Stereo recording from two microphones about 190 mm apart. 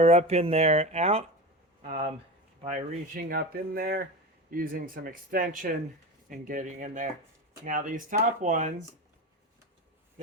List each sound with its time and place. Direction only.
0.0 s speech: 35° right (ahead or behind)
2.6 s speech: 45° right (ahead or behind)